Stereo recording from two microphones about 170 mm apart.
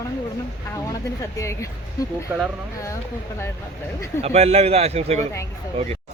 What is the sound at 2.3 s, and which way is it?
Speech, 10° right (ahead or behind).